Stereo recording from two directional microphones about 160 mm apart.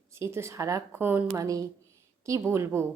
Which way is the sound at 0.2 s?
15° right (ahead or behind).